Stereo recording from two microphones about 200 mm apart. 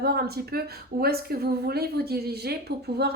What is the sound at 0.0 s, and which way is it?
A woman's voice, 50° right (ahead or behind).